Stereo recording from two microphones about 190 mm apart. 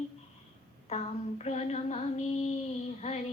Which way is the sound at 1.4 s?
35° left (ahead or behind).